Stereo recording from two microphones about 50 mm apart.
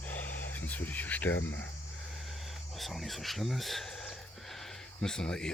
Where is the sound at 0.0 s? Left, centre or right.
Left.